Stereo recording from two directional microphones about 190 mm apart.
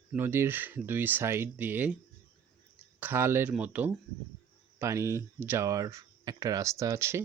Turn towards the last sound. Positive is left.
turn(degrees=-15)  # may be behind; listen again after turning